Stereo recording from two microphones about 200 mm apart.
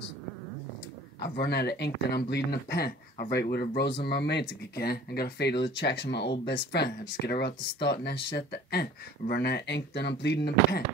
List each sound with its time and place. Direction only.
1.2 s speech: 55° left (ahead or behind)